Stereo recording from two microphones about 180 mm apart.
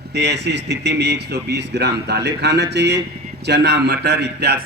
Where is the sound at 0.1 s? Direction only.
70° right (ahead or behind).